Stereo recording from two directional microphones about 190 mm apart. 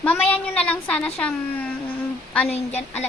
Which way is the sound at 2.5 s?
35° left (ahead or behind).